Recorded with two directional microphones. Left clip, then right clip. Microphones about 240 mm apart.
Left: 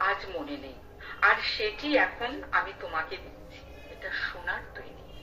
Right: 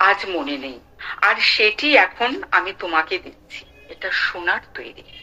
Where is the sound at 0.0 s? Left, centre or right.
Right.